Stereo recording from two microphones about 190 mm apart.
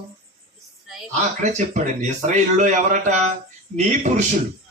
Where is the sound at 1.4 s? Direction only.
40° right (ahead or behind).